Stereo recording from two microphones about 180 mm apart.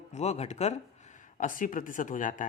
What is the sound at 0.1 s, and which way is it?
Speech, 40° left (ahead or behind).